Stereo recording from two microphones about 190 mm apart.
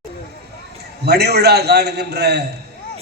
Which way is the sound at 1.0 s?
60° right (ahead or behind).